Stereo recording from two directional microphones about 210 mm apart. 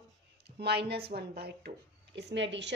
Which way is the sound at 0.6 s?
50° right (ahead or behind).